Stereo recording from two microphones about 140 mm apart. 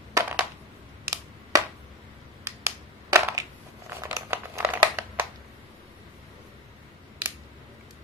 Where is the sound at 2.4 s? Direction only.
20° right (ahead or behind).